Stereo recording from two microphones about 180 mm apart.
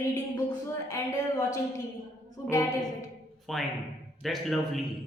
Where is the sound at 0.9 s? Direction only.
15° left (ahead or behind).